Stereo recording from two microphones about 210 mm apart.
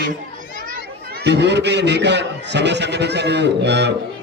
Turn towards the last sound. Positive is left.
turn(degrees=-55)  # may be behind; listen again after turning